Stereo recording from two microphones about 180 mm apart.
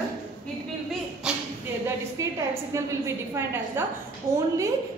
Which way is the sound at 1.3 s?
5° right (ahead or behind).